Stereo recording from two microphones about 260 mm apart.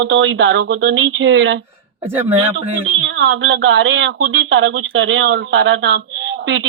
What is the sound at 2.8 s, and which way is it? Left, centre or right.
Speech, right.